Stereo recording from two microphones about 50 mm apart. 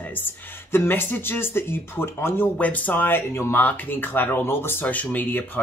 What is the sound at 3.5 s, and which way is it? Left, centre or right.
Speech, left.